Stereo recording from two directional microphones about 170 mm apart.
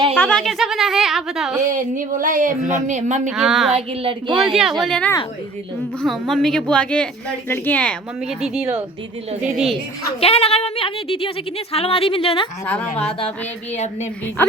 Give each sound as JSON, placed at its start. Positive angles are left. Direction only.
{"t": 0.2, "sound": "speech", "side_deg": 5}
{"t": 1.7, "sound": "a sound", "side_deg": -50}
{"t": 3.3, "sound": "speech", "side_deg": 0}
{"t": 3.7, "sound": "speech", "side_deg": -35}
{"t": 4.4, "sound": "speech", "side_deg": 0}
{"t": 9.4, "sound": "speech", "side_deg": -5}
{"t": 10.2, "sound": "speech", "side_deg": 35}
{"t": 12.6, "sound": "a woman's voice", "side_deg": 10}